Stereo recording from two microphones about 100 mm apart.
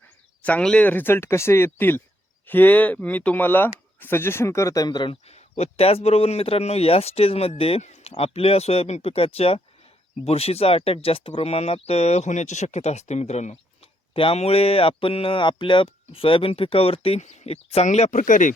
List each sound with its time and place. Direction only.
0.4 s speech: 10° left (ahead or behind); by 5.1 s 45° left (ahead or behind)
5.3 s speech: 90° left
14.1 s speech: 65° left (ahead or behind); by 18.1 s 90° left